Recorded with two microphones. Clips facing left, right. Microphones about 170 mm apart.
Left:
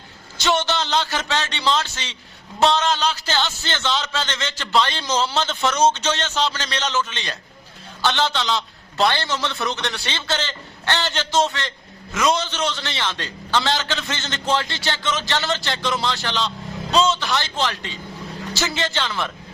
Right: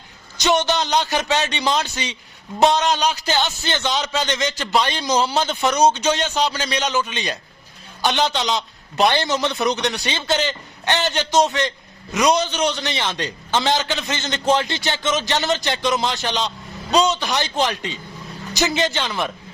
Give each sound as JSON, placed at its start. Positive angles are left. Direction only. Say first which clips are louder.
{"t": 0.3, "sound": "a man's voice", "louder": "right 3 dB", "side_deg": -15}